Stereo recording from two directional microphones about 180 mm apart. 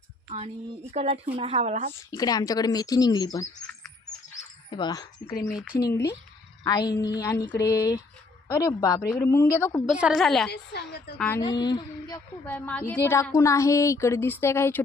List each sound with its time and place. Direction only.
0.3 s speech: 35° right (ahead or behind)
2.0 s speech: 20° left (ahead or behind)
4.7 s a woman's voice: 25° left (ahead or behind)
10.0 s a woman's voice: centre (ahead or behind)
10.5 s a woman's voice: 65° left (ahead or behind)
11.3 s speech: 25° left (ahead or behind)
12.5 s a woman's voice: 10° left (ahead or behind)